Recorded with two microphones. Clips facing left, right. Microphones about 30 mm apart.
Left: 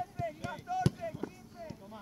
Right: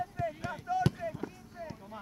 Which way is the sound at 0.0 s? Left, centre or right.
Centre.